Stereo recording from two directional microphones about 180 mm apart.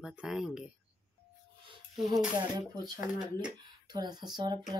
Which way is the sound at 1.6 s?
25° right (ahead or behind).